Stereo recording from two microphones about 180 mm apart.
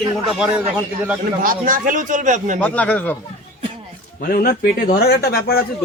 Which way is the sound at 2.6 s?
10° left (ahead or behind).